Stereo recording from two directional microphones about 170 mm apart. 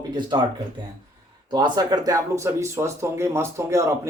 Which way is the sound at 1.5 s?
25° right (ahead or behind).